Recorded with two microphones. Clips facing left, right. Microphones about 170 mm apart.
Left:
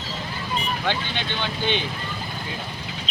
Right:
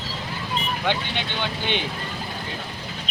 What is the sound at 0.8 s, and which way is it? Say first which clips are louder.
Speech: right 1 dB; 15° right (ahead or behind).